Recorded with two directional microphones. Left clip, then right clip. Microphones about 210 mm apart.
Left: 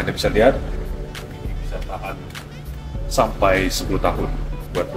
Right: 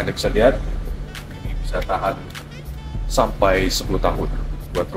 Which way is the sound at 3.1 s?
15° right (ahead or behind).